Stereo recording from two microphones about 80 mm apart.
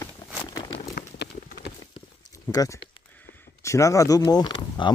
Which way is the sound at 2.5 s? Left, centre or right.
Left.